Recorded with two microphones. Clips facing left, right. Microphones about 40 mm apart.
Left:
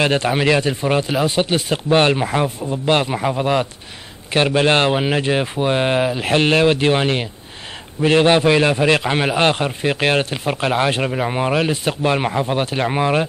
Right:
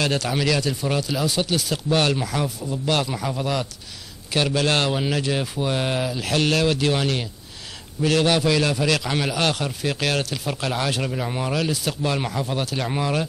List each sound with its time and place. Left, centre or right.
0.0 s a man's voice: left